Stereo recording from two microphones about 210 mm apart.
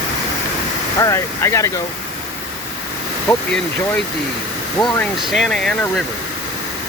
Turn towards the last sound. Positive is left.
turn(degrees=5)  # may be behind; listen again after turning